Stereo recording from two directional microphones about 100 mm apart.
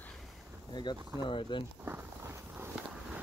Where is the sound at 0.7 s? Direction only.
50° left (ahead or behind).